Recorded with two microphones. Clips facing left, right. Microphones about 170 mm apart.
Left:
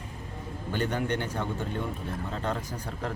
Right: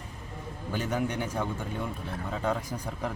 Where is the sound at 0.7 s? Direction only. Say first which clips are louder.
Left 1 dB; 5° right (ahead or behind).